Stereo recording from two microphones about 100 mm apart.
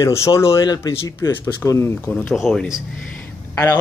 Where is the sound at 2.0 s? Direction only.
5° left (ahead or behind).